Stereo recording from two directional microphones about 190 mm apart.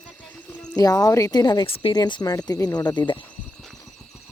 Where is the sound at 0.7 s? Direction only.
20° left (ahead or behind).